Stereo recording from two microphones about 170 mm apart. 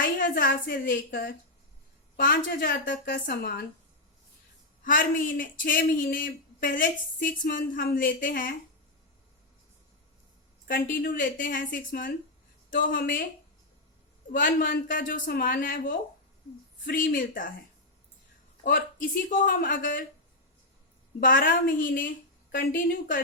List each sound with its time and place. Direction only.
0.0 s a woman's voice: 55° left (ahead or behind)
4.8 s speech: 55° left (ahead or behind)
10.7 s speech: 60° left (ahead or behind)
14.3 s speech: 55° left (ahead or behind)
18.6 s speech: 55° left (ahead or behind)
21.2 s speech: 55° left (ahead or behind)